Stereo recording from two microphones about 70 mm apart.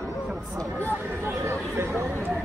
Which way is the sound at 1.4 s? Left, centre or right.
Right.